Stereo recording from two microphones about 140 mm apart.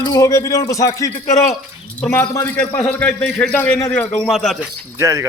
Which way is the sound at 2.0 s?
10° left (ahead or behind).